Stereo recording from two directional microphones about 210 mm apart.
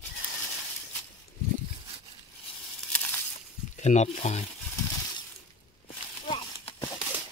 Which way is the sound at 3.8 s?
35° left (ahead or behind).